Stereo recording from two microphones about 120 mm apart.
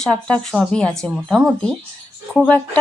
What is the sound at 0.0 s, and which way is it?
Speech, 10° left (ahead or behind).